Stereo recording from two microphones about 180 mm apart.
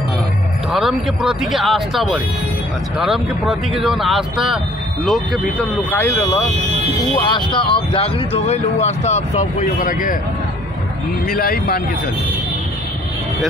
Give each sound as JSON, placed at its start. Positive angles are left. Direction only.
{"t": 0.7, "sound": "speech", "side_deg": 0}
{"t": 7.2, "sound": "speech", "side_deg": 25}
{"t": 11.2, "sound": "speech", "side_deg": 55}